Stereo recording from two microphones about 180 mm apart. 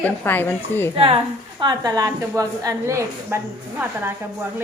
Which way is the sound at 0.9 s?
30° right (ahead or behind).